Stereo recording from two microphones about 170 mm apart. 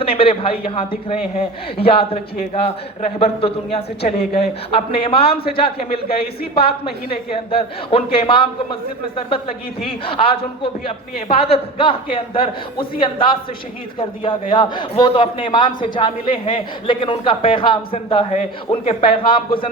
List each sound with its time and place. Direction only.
0.0 s a man's voice: 35° left (ahead or behind)